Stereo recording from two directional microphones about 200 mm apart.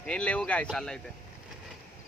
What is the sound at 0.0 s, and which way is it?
Speech, 5° left (ahead or behind).